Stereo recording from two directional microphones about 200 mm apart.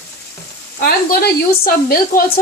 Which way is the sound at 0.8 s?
50° left (ahead or behind).